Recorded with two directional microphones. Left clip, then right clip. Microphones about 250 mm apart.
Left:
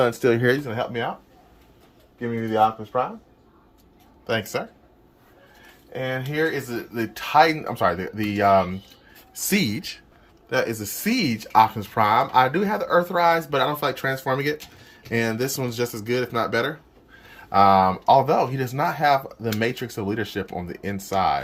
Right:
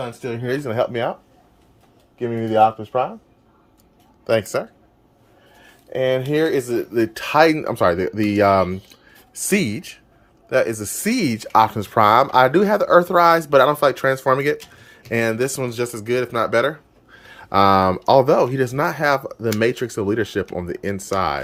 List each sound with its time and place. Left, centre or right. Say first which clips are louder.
0.0 s speech: left 8 dB; centre
0.6 s speech: right 6 dB; right
2.1 s speech: right 5 dB; right
4.3 s speech: right 6 dB; right
5.9 s speech: right 9 dB; right